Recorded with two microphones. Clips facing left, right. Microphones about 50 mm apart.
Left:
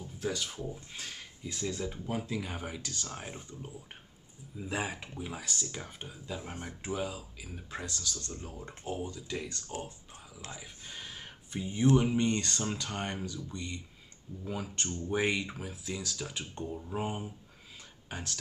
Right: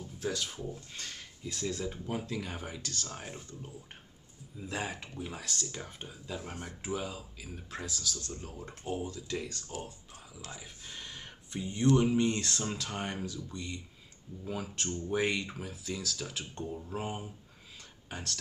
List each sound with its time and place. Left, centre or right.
0.0 s speech: centre
3.3 s speech: centre
6.4 s speech: left
6.8 s speech: centre
10.6 s speech: centre